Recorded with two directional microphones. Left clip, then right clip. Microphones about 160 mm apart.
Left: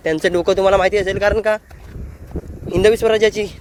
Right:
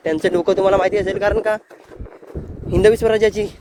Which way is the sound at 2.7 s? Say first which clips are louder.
Even; 25° right (ahead or behind).